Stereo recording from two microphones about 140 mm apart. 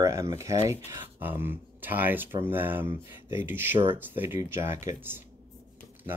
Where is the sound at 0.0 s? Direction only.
20° right (ahead or behind).